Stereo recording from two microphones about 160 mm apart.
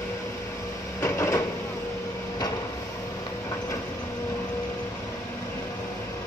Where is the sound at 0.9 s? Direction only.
15° left (ahead or behind).